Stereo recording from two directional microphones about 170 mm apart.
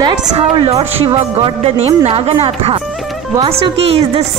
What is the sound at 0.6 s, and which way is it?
A woman's voice, 35° right (ahead or behind).